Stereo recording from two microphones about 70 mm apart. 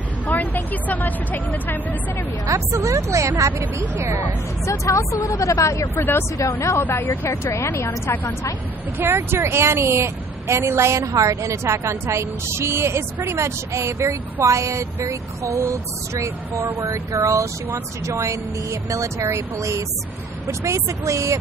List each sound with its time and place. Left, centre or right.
0.3 s speech: left
2.5 s a woman's voice: right
3.9 s speech: right
4.6 s speech: left
5.8 s speech: left
6.3 s speech: left
6.8 s speech: left
7.2 s a woman's voice: left
8.9 s a woman's voice: right